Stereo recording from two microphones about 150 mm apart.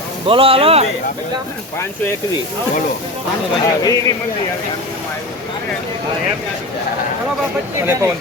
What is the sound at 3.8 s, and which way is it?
Speech, 25° left (ahead or behind).